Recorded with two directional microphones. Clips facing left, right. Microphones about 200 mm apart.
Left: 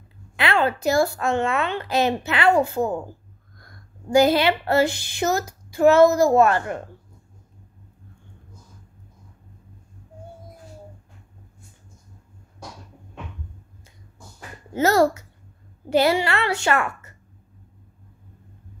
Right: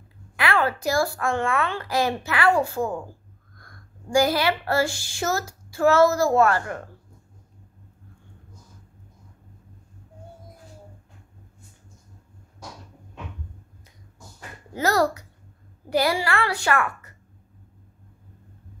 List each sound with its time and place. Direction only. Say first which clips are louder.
0.4 s a woman's voice: left 2 dB; 25° left (ahead or behind)
14.7 s a woman's voice: left 4 dB; 25° left (ahead or behind)